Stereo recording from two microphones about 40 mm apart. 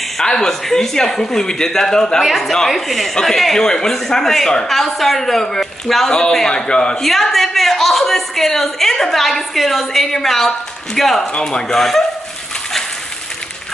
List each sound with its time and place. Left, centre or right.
0.2 s speech: centre
2.2 s a woman's voice: centre; by 7.0 s left
7.0 s speech: centre
11.3 s speech: centre